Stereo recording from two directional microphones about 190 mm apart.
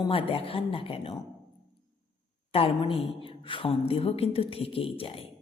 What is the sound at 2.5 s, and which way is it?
A woman's voice, 30° left (ahead or behind).